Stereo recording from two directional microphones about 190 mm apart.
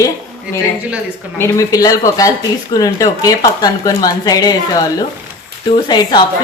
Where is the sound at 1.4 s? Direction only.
15° left (ahead or behind).